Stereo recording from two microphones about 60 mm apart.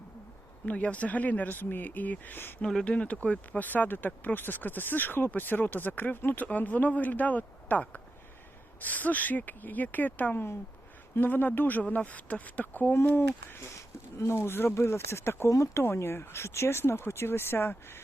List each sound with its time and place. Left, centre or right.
0.6 s speech: left
2.6 s speech: centre; by 15.8 s left
15.8 s speech: left